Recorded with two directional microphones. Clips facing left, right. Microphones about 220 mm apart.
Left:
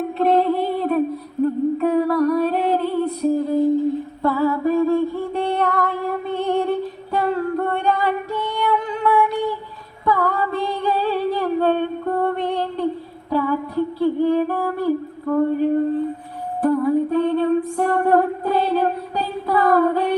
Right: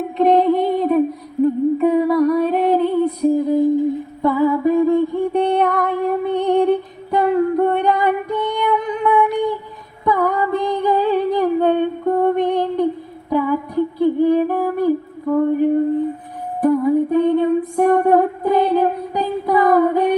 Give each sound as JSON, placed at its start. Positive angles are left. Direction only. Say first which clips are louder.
{"t": 0.2, "sound": "female singing", "louder": "right 4 dB", "side_deg": -15}
{"t": 1.4, "sound": "humming", "louder": "right 4 dB", "side_deg": -15}
{"t": 1.8, "sound": "music", "louder": "right 3 dB", "side_deg": -15}
{"t": 10.1, "sound": "female singing", "louder": "right 3 dB", "side_deg": -15}
{"t": 13.3, "sound": "a sound", "louder": "right 2 dB", "side_deg": -15}